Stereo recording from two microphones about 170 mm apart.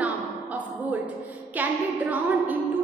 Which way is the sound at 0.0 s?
10° right (ahead or behind).